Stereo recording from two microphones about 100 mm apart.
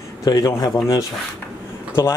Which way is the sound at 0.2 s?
40° left (ahead or behind).